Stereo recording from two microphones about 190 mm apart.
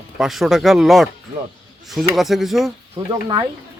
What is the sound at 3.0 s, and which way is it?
Speech, 30° right (ahead or behind).